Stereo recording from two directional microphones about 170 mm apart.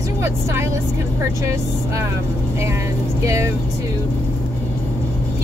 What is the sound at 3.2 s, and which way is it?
Speech, 15° right (ahead or behind).